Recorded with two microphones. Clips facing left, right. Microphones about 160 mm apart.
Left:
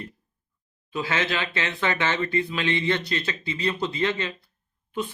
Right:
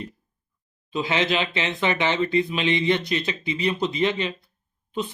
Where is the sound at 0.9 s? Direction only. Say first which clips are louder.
Right 3 dB; 20° right (ahead or behind).